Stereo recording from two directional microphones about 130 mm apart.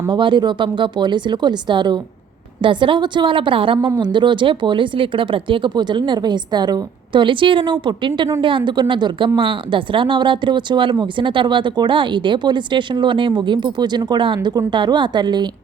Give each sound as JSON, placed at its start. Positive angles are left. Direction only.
{"t": 0.1, "sound": "a woman's voice", "side_deg": -35}